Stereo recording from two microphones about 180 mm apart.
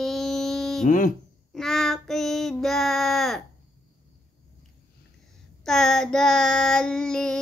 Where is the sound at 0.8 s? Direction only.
45° left (ahead or behind).